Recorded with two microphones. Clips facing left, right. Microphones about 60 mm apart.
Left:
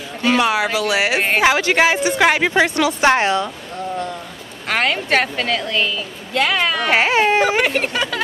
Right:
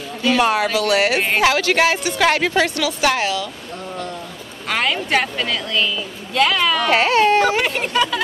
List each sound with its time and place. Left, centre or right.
0.4 s speech: centre
0.7 s a woman's voice: centre; by 3.4 s left
4.6 s a woman's voice: left
7.5 s speech: left